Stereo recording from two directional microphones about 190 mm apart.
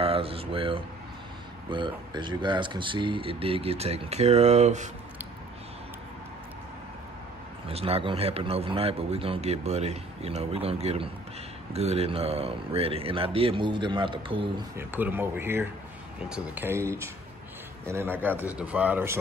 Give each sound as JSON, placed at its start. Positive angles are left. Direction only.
{"t": 0.0, "sound": "a sound", "side_deg": -30}
{"t": 1.7, "sound": "speech", "side_deg": -25}
{"t": 7.6, "sound": "a man's voice", "side_deg": -30}
{"t": 14.8, "sound": "a man's voice", "side_deg": -10}